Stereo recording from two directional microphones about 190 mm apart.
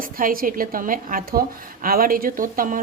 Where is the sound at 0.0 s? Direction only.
50° right (ahead or behind).